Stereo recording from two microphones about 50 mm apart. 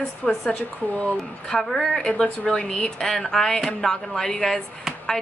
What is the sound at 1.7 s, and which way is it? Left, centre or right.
Speech, centre.